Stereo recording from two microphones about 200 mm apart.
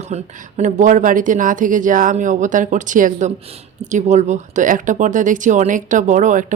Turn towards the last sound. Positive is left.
turn(degrees=-40)  # may be behind; listen again after turning